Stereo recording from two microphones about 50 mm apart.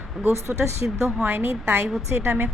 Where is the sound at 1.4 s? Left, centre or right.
Right.